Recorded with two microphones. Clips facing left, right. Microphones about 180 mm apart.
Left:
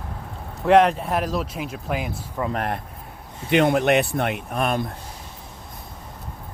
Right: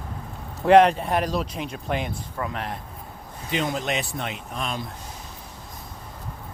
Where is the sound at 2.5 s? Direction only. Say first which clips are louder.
Left 6 dB; 55° left (ahead or behind).